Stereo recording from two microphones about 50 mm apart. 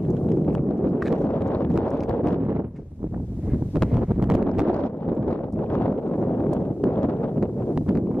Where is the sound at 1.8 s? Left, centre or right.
Left.